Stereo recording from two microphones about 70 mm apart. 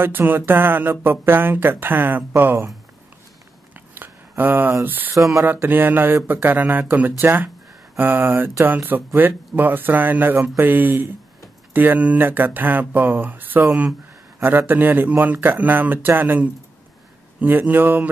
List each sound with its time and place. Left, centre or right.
0.0 s speech: right
3.7 s a sound: right
4.8 s speech: right